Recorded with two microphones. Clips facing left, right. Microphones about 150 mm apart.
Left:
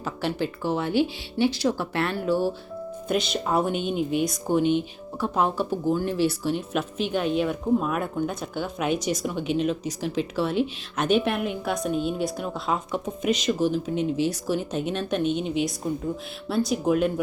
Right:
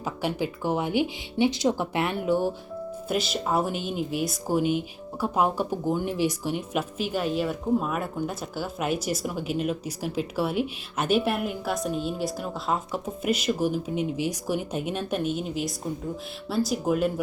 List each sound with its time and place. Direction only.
0.0 s speech: 10° right (ahead or behind)
3.1 s speech: 5° right (ahead or behind)